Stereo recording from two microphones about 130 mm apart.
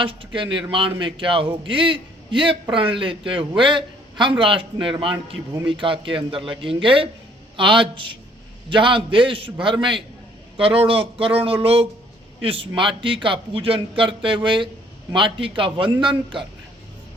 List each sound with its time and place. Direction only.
0.0 s a man's voice: 40° right (ahead or behind)